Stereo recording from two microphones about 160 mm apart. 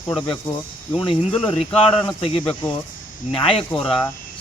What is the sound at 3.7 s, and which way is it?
Speech, 30° left (ahead or behind).